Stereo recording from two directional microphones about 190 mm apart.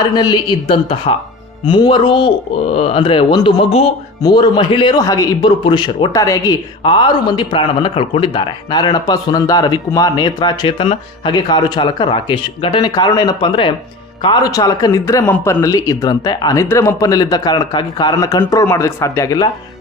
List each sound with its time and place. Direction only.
0.0 s a man's voice: 25° left (ahead or behind)